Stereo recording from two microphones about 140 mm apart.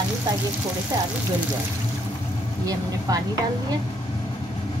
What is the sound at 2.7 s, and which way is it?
Speech, 25° right (ahead or behind).